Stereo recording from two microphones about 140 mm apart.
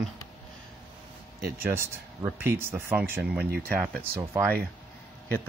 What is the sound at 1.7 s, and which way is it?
Speech, 20° right (ahead or behind).